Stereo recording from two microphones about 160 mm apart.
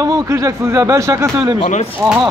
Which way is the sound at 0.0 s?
20° right (ahead or behind).